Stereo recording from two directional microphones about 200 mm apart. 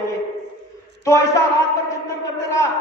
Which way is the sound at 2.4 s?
15° left (ahead or behind).